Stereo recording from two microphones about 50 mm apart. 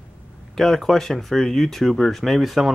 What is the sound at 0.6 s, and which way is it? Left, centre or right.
Speech, centre.